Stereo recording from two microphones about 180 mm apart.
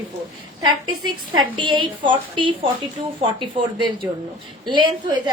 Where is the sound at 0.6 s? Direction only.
25° right (ahead or behind).